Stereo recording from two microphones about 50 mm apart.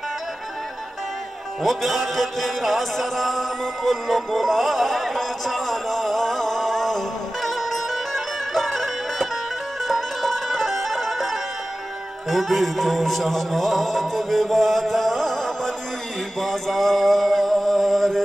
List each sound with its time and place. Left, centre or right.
1.6 s music: centre
9.8 s bagpipes: centre
12.3 s music: centre